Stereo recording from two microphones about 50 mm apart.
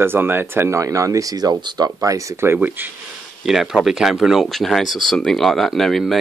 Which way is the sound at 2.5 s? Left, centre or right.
Right.